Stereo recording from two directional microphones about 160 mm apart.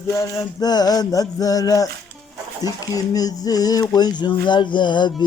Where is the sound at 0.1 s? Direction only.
20° left (ahead or behind).